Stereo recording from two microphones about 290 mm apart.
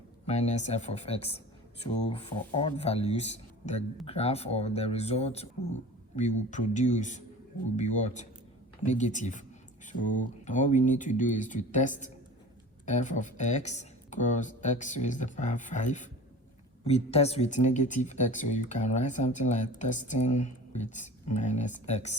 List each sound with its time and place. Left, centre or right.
0.3 s speech: left